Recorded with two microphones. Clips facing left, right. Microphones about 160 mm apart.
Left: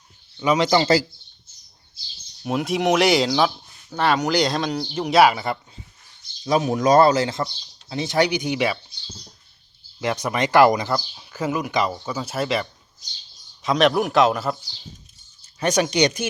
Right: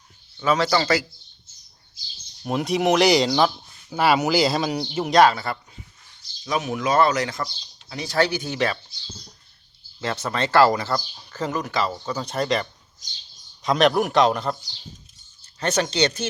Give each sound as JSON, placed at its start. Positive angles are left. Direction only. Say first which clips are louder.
{"t": 0.3, "sound": "speech", "louder": "left 2 dB", "side_deg": 15}
{"t": 2.4, "sound": "speech", "louder": "even", "side_deg": 0}
{"t": 5.1, "sound": "speech", "louder": "left 1 dB", "side_deg": 10}
{"t": 6.4, "sound": "speech", "louder": "left 5 dB", "side_deg": 30}
{"t": 10.0, "sound": "speech", "louder": "left 3 dB", "side_deg": 15}
{"t": 15.5, "sound": "speech", "louder": "left 3 dB", "side_deg": 15}